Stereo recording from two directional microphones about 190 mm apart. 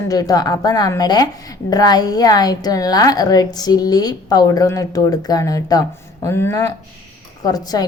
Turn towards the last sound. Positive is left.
turn(degrees=20)  # may be behind; listen again after turning